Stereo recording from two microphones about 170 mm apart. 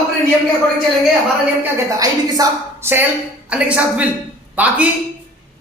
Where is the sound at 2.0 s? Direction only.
20° right (ahead or behind).